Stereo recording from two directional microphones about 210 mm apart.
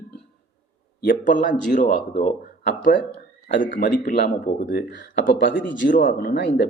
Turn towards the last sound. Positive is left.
turn(degrees=55)  # may be behind; listen again after turning